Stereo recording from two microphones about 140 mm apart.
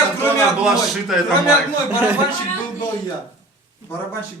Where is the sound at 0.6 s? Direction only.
5° right (ahead or behind).